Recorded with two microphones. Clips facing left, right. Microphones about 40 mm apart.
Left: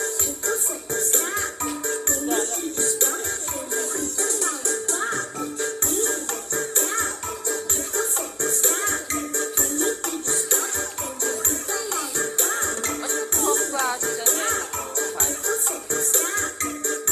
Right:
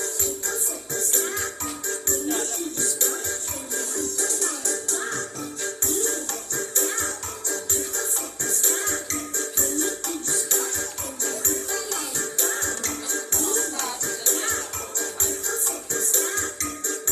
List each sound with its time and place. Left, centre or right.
0.0 s music: left